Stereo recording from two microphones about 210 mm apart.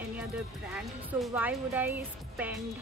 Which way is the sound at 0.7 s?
5° right (ahead or behind).